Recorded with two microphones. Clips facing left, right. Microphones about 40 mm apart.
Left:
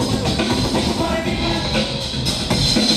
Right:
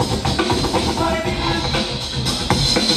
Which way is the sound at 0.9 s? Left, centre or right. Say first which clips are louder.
Right 1 dB; right.